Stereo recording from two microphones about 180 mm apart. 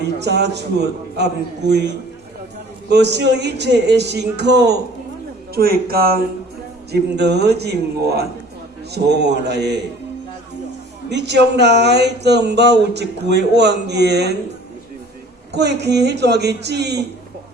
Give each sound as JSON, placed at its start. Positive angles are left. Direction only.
{"t": 0.0, "sound": "a man's voice", "side_deg": -70}
{"t": 11.1, "sound": "speech", "side_deg": -70}
{"t": 15.5, "sound": "speech", "side_deg": -70}